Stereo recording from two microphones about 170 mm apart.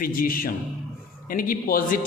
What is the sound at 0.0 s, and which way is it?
A man's voice, 55° left (ahead or behind).